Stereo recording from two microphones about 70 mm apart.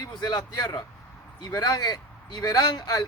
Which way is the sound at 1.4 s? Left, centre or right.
Left.